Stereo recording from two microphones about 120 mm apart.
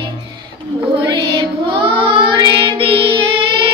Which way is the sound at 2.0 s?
45° right (ahead or behind).